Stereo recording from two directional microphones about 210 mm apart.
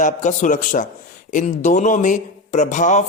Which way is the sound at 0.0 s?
35° left (ahead or behind).